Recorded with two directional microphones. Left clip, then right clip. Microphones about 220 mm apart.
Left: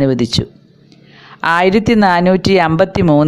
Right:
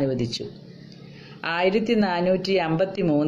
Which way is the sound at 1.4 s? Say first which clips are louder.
Left 11 dB; 45° left (ahead or behind).